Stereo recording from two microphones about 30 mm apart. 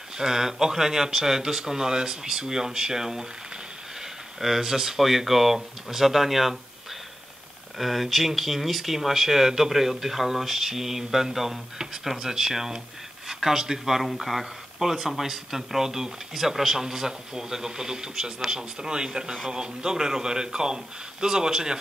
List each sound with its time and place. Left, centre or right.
0.2 s speech: centre
7.7 s speech: centre
14.0 s speech: centre; by 21.7 s right